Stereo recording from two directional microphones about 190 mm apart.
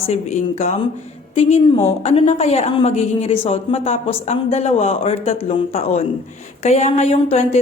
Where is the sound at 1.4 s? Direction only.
35° left (ahead or behind).